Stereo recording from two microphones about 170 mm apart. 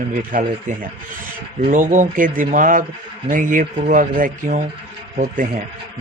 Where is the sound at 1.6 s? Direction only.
50° right (ahead or behind).